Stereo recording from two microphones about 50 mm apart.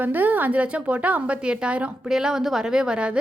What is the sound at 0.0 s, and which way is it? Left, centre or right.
A woman's voice, right.